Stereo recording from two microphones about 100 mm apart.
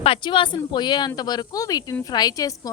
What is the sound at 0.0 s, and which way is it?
A woman's voice, 60° left (ahead or behind).